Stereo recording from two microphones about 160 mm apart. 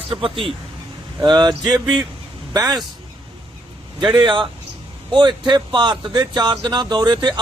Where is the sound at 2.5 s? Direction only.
25° right (ahead or behind).